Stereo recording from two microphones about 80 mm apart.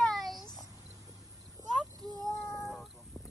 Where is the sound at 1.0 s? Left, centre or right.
Right.